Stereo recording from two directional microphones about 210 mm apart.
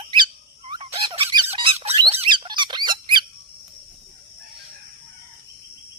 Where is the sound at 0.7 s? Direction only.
25° right (ahead or behind).